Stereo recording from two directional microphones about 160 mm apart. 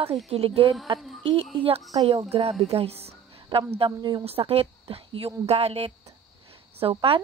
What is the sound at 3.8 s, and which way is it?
A woman's voice, 25° right (ahead or behind).